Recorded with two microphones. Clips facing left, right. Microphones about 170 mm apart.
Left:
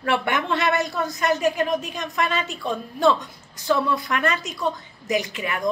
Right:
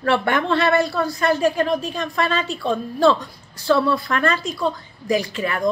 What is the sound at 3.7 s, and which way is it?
A woman's voice, 15° left (ahead or behind).